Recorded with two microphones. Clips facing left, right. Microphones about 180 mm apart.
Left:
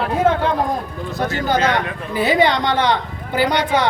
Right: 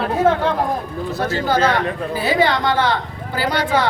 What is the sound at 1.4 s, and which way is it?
Speech, 20° left (ahead or behind).